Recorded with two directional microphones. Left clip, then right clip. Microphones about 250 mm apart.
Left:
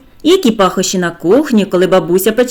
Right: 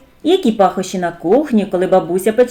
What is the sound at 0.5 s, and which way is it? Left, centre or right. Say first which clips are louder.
A woman's voice: left 2 dB; left.